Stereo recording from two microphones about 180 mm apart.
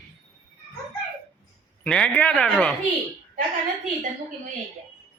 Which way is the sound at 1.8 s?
5° left (ahead or behind).